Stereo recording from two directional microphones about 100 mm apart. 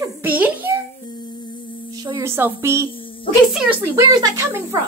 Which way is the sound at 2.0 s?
45° right (ahead or behind).